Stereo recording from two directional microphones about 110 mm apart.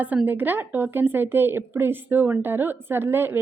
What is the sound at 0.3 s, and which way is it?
A woman's voice, 15° right (ahead or behind).